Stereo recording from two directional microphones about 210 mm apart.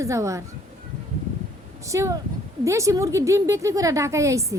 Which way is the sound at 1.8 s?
15° right (ahead or behind).